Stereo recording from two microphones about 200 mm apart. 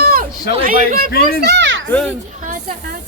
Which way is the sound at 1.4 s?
55° right (ahead or behind).